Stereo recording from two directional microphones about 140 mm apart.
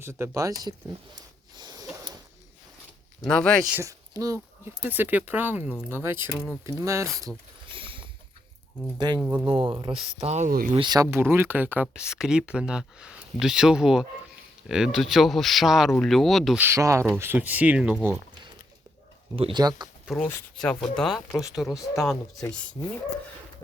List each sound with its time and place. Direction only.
0.0 s speech: 20° right (ahead or behind)
1.5 s a sound: 30° right (ahead or behind)
3.2 s speech: 5° left (ahead or behind)
3.7 s speech: 15° right (ahead or behind)
7.3 s speech: centre (ahead or behind)
7.7 s boat: 40° right (ahead or behind)
9.0 s speech: 30° right (ahead or behind)
9.2 s speech: 10° right (ahead or behind)
9.8 s speech: 50° right (ahead or behind)
10.8 s speech: 30° right (ahead or behind); by 16.6 s centre (ahead or behind)
16.6 s speech: 20° right (ahead or behind)
19.4 s speech: 35° right (ahead or behind)
20.1 s speech: 5° left (ahead or behind)